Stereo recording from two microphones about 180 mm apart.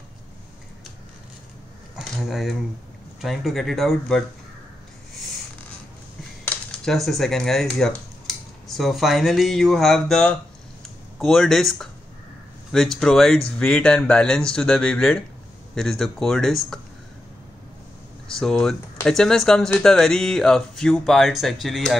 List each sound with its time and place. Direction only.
2.0 s a sound: centre (ahead or behind)
3.2 s speech: centre (ahead or behind)
6.4 s speech: centre (ahead or behind)
18.4 s speech: 5° left (ahead or behind)